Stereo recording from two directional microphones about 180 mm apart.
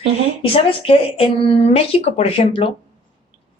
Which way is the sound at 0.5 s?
30° left (ahead or behind).